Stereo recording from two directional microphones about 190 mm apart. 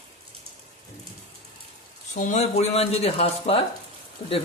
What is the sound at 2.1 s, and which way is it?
Speech, 40° left (ahead or behind).